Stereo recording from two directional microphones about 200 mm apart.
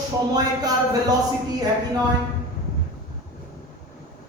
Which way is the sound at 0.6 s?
20° right (ahead or behind).